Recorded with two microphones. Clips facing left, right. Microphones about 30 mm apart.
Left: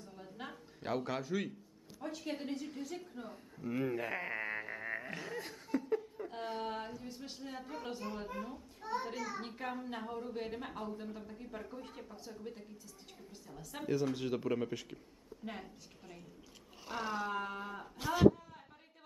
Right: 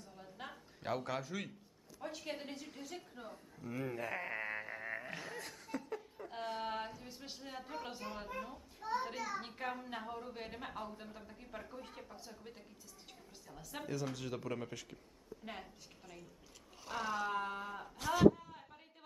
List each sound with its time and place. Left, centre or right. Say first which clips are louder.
0.0 s a sound: left 2 dB; centre
2.0 s speech: left 3 dB; centre
3.6 s speech: left 5 dB; centre
14.1 s speech: left 6 dB; centre
15.4 s speech: left 4 dB; centre